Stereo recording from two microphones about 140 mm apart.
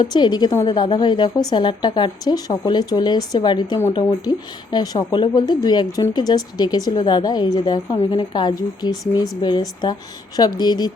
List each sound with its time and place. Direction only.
0.0 s a woman's voice: 30° left (ahead or behind)